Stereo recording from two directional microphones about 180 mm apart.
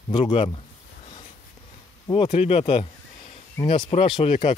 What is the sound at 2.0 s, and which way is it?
Speech, 25° left (ahead or behind).